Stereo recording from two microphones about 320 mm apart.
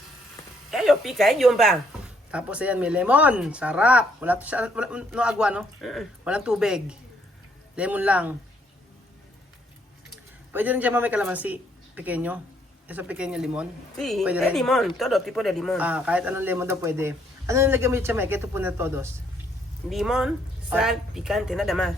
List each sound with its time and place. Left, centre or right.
0.7 s a woman's voice: centre
10.5 s a woman's voice: centre